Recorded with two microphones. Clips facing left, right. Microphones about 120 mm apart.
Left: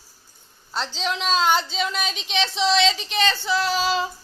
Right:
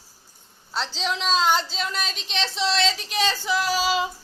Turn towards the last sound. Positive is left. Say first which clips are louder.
# left 1 dB
turn(degrees=-10)  # may be behind; listen again after turning